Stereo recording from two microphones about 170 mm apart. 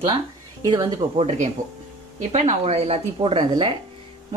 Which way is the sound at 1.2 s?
40° right (ahead or behind).